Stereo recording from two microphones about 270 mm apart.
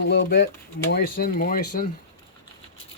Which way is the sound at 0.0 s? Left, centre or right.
Left.